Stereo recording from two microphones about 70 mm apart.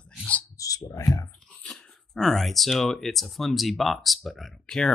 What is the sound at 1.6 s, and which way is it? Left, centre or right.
Speech, centre.